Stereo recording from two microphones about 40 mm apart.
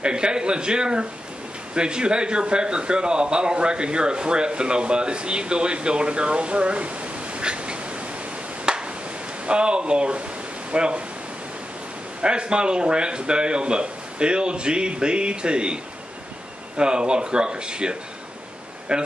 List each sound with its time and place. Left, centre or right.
0.0 s a man's voice: right
8.6 s a sound: right
9.5 s a man's voice: right
12.2 s a man's voice: right